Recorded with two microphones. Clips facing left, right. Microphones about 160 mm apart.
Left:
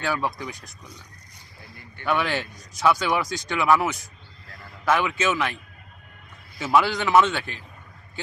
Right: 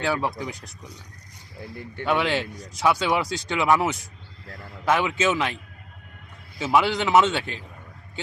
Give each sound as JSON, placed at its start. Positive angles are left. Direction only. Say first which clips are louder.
{"t": 0.0, "sound": "speech", "louder": "right 1 dB", "side_deg": -25}
{"t": 2.0, "sound": "speech", "louder": "right 1 dB", "side_deg": -25}
{"t": 6.6, "sound": "speech", "louder": "even", "side_deg": -20}